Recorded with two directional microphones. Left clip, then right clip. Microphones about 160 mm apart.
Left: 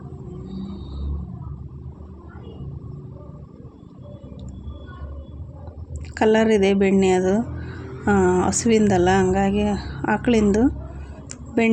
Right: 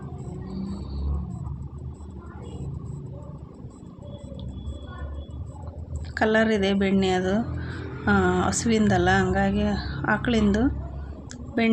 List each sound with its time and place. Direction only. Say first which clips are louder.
6.1 s a woman's voice: left 4 dB; 25° left (ahead or behind)